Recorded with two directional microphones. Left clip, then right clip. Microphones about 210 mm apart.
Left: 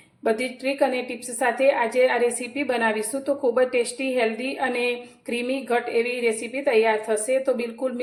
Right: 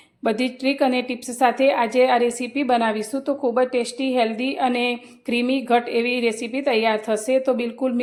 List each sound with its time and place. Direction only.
0.3 s a woman's voice: 40° right (ahead or behind)